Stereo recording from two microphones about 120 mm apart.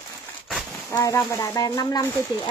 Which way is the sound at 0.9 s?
25° left (ahead or behind).